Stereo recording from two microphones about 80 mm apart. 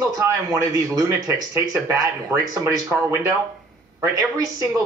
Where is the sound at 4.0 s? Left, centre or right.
Right.